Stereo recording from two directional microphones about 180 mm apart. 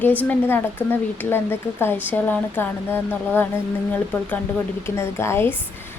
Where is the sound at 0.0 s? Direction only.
10° left (ahead or behind).